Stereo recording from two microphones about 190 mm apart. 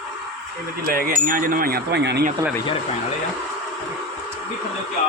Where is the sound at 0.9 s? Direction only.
50° right (ahead or behind).